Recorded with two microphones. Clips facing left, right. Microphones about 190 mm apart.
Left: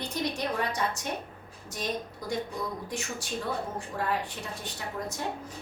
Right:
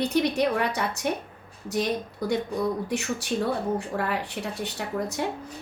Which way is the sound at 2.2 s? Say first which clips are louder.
Right 8 dB; 65° right (ahead or behind).